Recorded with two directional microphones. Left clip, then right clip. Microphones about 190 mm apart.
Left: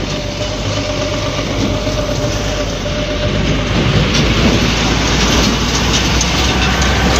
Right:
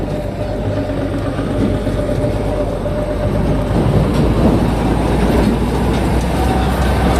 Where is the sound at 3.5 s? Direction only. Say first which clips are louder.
Left 2 dB; 30° right (ahead or behind).